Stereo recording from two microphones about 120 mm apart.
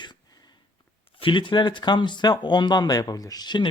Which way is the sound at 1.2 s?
45° left (ahead or behind).